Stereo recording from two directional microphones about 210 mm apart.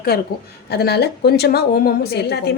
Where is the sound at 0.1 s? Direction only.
50° left (ahead or behind).